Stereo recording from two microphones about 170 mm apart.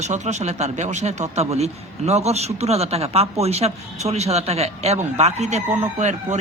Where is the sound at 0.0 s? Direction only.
40° right (ahead or behind).